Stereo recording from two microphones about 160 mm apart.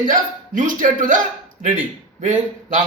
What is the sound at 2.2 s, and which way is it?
Speech, 50° right (ahead or behind).